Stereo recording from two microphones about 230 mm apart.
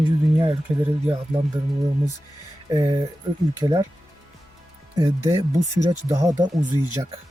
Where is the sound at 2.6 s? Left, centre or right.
Centre.